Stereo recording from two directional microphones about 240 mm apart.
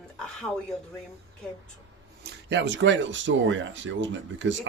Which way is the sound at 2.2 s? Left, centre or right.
Right.